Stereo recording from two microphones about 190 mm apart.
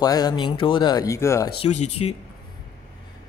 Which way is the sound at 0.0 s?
20° left (ahead or behind).